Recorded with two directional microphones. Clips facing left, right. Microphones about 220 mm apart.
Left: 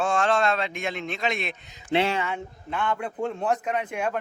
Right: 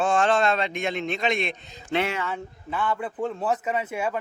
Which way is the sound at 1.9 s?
25° left (ahead or behind).